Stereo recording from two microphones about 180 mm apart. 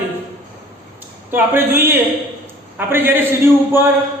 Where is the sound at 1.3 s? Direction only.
10° right (ahead or behind).